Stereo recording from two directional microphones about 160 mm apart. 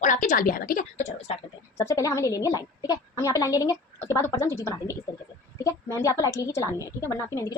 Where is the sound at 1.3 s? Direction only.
40° left (ahead or behind).